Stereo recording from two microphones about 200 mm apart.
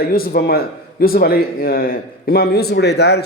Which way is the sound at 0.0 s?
50° left (ahead or behind).